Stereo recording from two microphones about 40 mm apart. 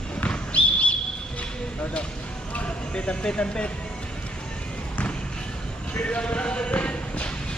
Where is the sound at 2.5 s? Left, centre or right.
Left.